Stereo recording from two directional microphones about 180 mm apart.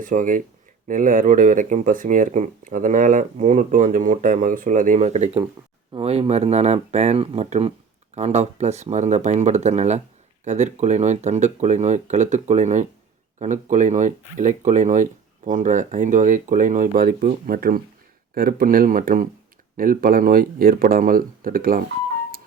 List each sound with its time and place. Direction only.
0.0 s speech: 45° right (ahead or behind)